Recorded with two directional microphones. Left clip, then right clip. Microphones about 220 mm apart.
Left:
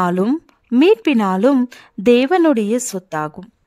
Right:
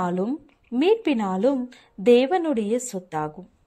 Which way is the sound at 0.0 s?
45° left (ahead or behind).